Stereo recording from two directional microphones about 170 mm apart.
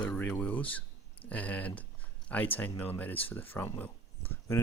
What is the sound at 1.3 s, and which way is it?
Speech, 10° left (ahead or behind).